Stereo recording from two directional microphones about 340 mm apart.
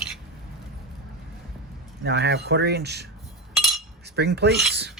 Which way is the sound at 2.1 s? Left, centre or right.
Right.